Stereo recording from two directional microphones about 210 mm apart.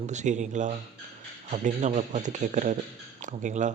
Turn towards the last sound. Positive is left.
turn(degrees=-35)  # may be behind; listen again after turning